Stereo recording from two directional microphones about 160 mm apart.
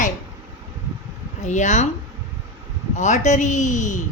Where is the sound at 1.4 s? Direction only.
50° left (ahead or behind).